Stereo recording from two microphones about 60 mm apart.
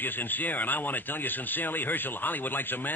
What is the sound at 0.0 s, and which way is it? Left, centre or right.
Speech, left.